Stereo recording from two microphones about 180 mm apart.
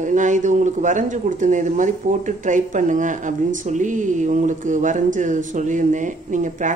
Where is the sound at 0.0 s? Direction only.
45° right (ahead or behind).